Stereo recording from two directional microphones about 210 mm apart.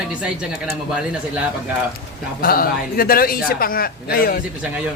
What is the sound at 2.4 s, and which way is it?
A man's voice, 45° left (ahead or behind).